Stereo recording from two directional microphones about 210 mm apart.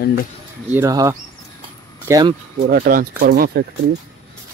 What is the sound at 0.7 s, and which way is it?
Speech, 15° right (ahead or behind).